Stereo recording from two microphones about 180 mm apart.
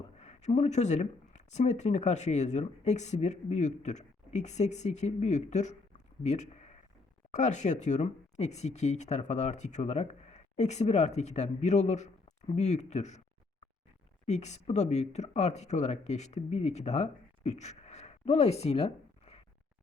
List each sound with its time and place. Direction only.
0.2 s speech: 40° left (ahead or behind)
14.3 s speech: 40° left (ahead or behind)